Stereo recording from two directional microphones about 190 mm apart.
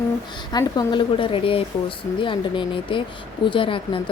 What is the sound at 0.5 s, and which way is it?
Speech, 20° left (ahead or behind).